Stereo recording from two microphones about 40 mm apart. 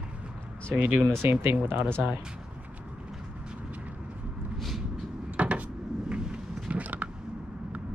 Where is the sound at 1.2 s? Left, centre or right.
Right.